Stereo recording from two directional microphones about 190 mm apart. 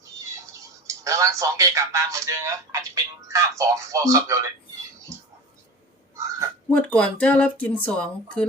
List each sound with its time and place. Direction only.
1.0 s speech: 15° right (ahead or behind)
6.7 s speech: 5° left (ahead or behind)